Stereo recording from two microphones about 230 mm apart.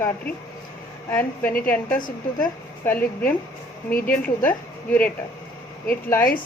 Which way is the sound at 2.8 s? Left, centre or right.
Centre.